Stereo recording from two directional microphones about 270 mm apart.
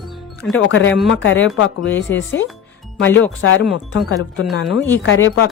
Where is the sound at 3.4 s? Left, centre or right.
Left.